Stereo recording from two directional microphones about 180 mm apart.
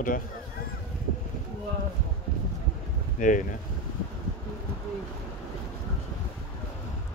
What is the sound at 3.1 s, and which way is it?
Speech, 45° left (ahead or behind).